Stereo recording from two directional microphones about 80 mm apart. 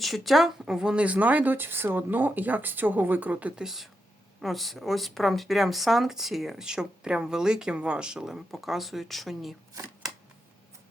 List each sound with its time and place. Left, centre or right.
0.0 s speech: centre
3.6 s speech: centre